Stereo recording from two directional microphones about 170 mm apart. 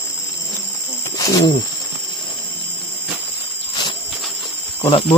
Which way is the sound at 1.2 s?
20° left (ahead or behind).